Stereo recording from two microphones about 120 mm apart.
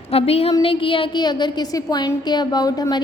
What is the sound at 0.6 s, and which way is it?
Speech, 50° left (ahead or behind).